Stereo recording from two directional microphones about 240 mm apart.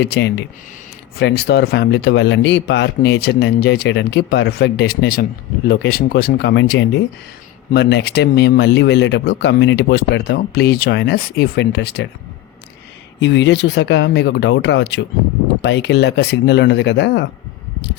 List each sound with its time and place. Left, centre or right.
0.0 s speech: left
13.1 s speech: left